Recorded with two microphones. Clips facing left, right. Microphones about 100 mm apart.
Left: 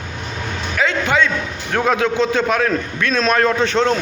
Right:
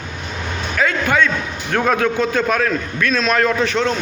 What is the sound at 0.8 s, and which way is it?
A man's voice, 20° left (ahead or behind).